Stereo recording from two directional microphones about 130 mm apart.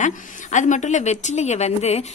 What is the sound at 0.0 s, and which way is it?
A woman's voice, 70° left (ahead or behind).